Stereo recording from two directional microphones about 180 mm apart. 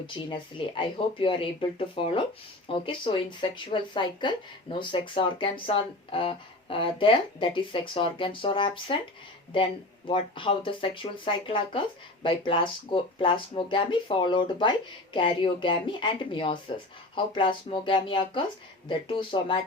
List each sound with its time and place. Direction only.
0.3 s speech: 30° left (ahead or behind)
10.1 s speech: 30° left (ahead or behind)